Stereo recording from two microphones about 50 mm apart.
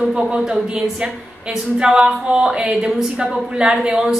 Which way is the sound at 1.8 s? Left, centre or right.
Centre.